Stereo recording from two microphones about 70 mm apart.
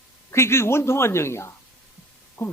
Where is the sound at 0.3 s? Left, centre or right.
Left.